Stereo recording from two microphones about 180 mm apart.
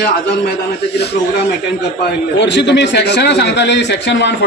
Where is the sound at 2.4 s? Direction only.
80° left.